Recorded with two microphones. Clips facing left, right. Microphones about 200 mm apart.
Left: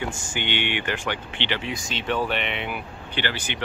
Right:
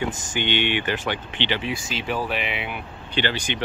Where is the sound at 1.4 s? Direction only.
15° left (ahead or behind).